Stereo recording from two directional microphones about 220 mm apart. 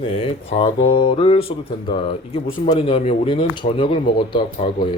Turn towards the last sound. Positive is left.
turn(degrees=20)  # may be behind; listen again after turning